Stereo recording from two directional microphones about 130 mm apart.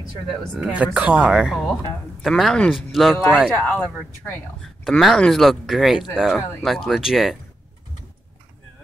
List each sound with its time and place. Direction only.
0.7 s a man's voice: 10° right (ahead or behind)